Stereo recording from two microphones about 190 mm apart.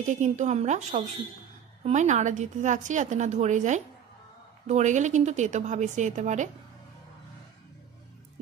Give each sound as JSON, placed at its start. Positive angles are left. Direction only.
{"t": 0.0, "sound": "a woman's voice", "side_deg": -40}